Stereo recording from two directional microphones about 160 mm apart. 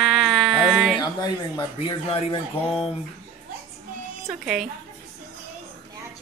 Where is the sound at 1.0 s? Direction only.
25° left (ahead or behind).